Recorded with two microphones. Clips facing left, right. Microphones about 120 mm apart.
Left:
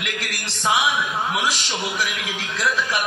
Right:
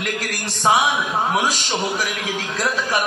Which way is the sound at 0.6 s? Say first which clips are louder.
Right 4 dB; 45° right (ahead or behind).